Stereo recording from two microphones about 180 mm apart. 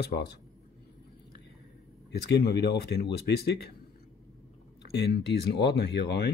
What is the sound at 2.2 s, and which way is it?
Speech, 65° left (ahead or behind).